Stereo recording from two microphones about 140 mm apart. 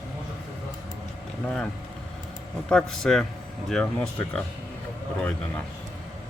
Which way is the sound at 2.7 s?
5° left (ahead or behind).